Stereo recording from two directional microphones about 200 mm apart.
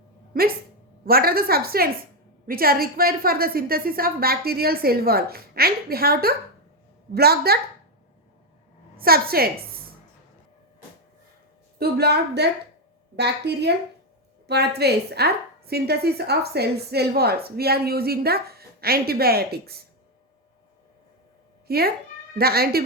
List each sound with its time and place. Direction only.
1.0 s a woman's voice: 50° right (ahead or behind)
9.0 s a woman's voice: 50° right (ahead or behind)
11.8 s a woman's voice: 55° right (ahead or behind)
21.7 s a woman's voice: 50° right (ahead or behind)